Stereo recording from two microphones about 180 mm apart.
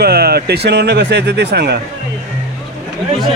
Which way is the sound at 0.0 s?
60° right (ahead or behind).